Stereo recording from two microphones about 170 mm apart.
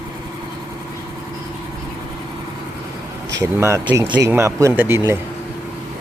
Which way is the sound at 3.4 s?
15° right (ahead or behind).